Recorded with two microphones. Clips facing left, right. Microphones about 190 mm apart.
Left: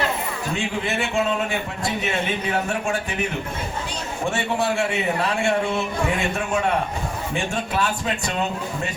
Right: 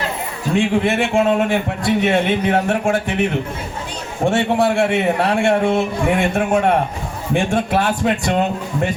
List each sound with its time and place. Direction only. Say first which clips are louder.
0.5 s a man's voice: right 10 dB; 55° right (ahead or behind)
4.2 s a man's voice: right 8 dB; 50° right (ahead or behind)